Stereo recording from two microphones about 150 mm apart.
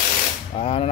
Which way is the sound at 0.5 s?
40° left (ahead or behind).